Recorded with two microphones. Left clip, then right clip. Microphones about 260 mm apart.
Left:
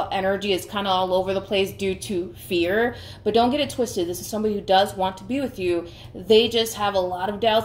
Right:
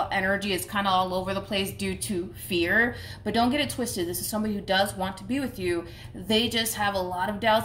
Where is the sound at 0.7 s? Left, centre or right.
Right.